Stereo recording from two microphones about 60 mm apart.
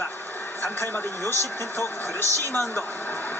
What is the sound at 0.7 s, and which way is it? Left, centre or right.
A woman's voice, left.